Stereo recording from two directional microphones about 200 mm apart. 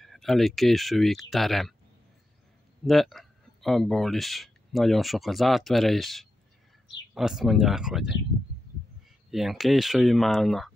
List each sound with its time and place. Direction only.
0.0 s speech: centre (ahead or behind)
2.8 s speech: centre (ahead or behind)
9.3 s speech: centre (ahead or behind)